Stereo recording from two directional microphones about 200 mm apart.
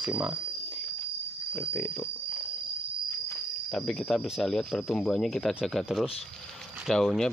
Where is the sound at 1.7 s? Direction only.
10° left (ahead or behind).